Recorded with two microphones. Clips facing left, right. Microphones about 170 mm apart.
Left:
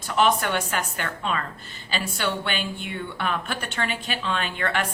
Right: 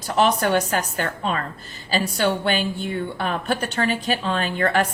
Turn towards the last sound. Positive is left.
turn(degrees=-40)  # may be behind; listen again after turning